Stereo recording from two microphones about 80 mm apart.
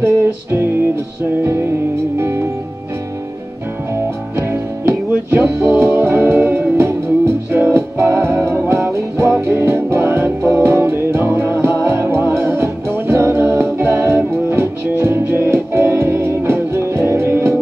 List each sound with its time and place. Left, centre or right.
0.0 s music: right
2.1 s music: right
3.9 s music: right
9.3 s music: right